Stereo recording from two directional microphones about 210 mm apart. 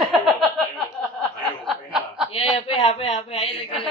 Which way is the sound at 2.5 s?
25° left (ahead or behind).